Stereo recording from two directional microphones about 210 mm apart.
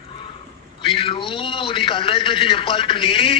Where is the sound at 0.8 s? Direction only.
25° left (ahead or behind).